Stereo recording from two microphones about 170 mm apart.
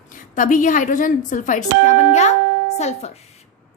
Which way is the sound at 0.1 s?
50° left (ahead or behind).